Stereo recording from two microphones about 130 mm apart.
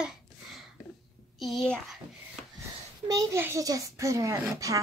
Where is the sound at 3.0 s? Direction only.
25° right (ahead or behind).